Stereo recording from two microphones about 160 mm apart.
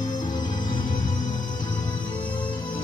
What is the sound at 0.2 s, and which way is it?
Music, 25° left (ahead or behind).